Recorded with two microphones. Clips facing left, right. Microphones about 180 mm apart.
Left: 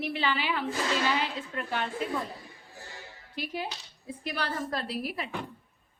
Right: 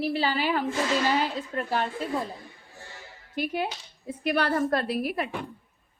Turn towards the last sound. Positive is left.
turn(degrees=-55)  # may be behind; listen again after turning